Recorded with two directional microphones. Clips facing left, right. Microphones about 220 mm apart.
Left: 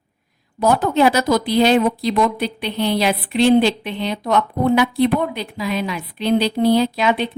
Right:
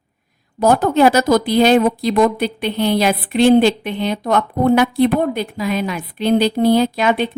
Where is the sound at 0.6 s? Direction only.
45° right (ahead or behind).